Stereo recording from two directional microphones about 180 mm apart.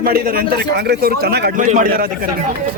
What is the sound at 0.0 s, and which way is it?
A man's voice, 55° right (ahead or behind).